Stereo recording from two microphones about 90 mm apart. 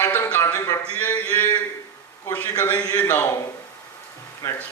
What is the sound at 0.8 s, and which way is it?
Speech, 15° left (ahead or behind).